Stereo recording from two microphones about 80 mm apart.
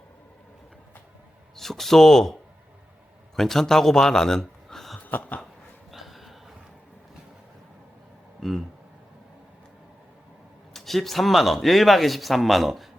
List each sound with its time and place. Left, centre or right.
1.5 s speech: centre
3.3 s speech: centre
4.9 s a sound: left
5.9 s a sound: centre
8.4 s speech: centre
10.8 s speech: centre